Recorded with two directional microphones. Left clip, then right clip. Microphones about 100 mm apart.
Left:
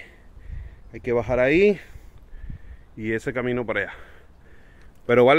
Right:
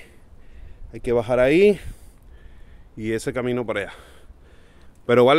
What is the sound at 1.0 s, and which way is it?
Speech, 40° right (ahead or behind).